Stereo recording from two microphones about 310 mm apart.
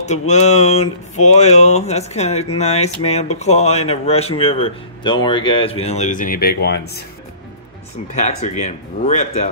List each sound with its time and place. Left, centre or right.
0.3 s speech: left
8.1 s speech: left